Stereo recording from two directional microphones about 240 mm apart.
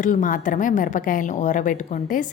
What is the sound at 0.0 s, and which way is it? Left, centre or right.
A woman's voice, left.